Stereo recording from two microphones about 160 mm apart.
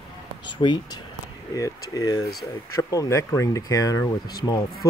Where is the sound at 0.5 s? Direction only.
30° left (ahead or behind).